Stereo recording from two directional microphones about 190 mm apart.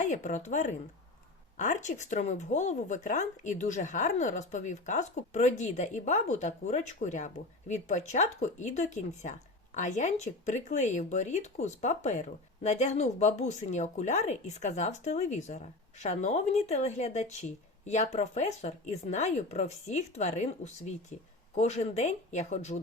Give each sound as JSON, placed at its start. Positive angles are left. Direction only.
{"t": 0.0, "sound": "speech", "side_deg": 40}